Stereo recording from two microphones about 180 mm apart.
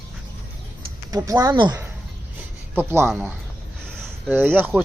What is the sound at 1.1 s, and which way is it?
Speech, 20° right (ahead or behind).